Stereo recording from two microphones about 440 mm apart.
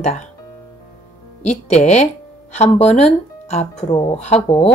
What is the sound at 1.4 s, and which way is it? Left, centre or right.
Speech, centre.